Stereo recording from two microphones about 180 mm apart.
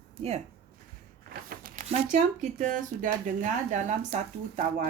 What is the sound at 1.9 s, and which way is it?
Speech, 40° right (ahead or behind).